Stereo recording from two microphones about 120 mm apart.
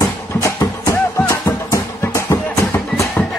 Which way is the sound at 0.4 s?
25° left (ahead or behind).